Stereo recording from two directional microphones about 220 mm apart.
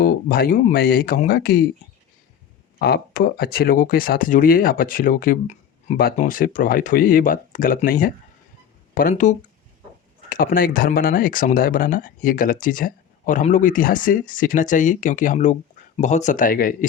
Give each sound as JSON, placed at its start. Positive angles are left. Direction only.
{"t": 0.0, "sound": "speech", "side_deg": 40}
{"t": 2.7, "sound": "speech", "side_deg": 45}